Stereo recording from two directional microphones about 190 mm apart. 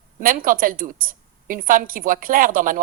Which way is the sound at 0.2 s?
45° right (ahead or behind).